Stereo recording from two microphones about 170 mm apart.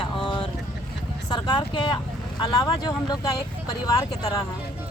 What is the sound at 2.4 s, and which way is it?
Speech, 25° left (ahead or behind).